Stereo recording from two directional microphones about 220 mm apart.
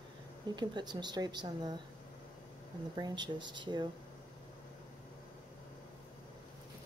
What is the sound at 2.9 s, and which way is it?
Speech, 20° right (ahead or behind).